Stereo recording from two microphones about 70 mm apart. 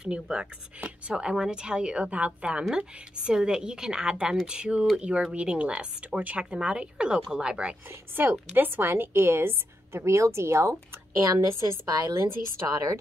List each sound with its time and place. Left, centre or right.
0.0 s speech: centre
7.9 s a woman's voice: right
12.6 s a woman's voice: right